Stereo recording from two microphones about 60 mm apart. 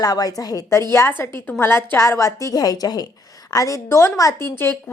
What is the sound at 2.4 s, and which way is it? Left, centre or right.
Speech, left.